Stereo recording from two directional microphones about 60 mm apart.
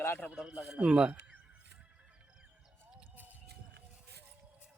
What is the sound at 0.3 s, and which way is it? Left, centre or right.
Speech, centre.